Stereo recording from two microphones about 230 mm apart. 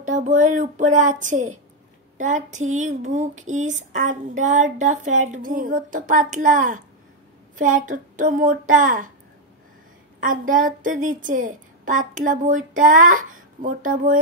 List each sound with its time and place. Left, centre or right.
0.0 s a woman's voice: right
10.2 s a woman's voice: right